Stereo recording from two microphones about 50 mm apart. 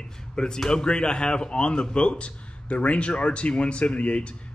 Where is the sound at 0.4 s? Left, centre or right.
Centre.